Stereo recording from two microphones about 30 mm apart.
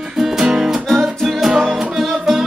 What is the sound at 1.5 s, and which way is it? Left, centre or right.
Music, centre.